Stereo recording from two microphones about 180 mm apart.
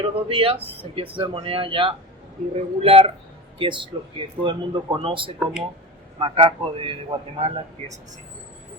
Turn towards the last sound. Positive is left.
turn(degrees=-35)  # may be behind; listen again after turning